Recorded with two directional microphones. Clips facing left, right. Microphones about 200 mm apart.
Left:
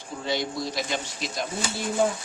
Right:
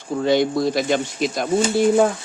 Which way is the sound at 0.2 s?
55° right (ahead or behind).